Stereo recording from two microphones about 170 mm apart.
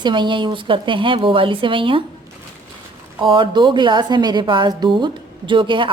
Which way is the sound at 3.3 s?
30° right (ahead or behind).